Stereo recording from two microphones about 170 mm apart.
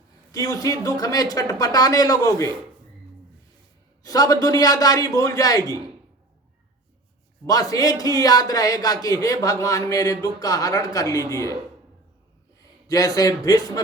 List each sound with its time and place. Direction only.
0.3 s a man's voice: 20° left (ahead or behind)
4.0 s a man's voice: 20° left (ahead or behind)
7.4 s a man's voice: 20° left (ahead or behind)
12.9 s a man's voice: 20° left (ahead or behind)